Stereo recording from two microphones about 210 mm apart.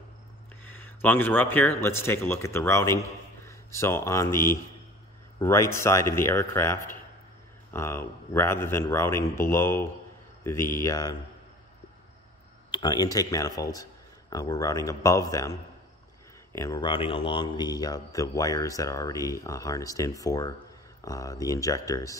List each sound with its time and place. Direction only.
0.7 s speech: 10° left (ahead or behind)
12.7 s speech: 20° left (ahead or behind)
16.5 s speech: 15° left (ahead or behind)